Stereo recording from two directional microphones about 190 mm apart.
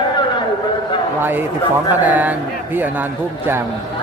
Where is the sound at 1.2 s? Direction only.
10° right (ahead or behind).